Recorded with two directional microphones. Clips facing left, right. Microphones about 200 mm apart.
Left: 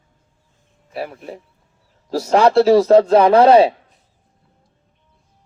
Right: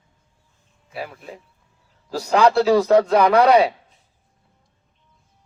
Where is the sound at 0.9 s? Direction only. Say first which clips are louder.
Left 5 dB; 40° left (ahead or behind).